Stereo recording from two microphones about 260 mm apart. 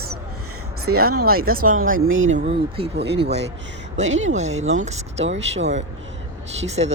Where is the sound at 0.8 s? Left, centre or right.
Right.